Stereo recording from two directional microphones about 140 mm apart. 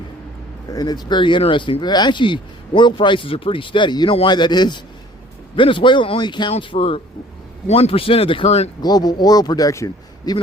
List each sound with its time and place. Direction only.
0.7 s speech: 30° left (ahead or behind); by 8.7 s 50° left (ahead or behind)
8.8 s a man's voice: 30° left (ahead or behind)